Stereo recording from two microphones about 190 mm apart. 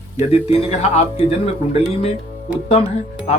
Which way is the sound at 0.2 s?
30° left (ahead or behind).